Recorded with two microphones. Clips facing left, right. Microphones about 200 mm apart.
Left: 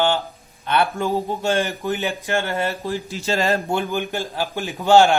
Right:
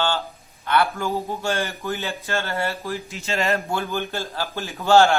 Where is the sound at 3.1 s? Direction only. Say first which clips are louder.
Left 3 dB; 35° left (ahead or behind).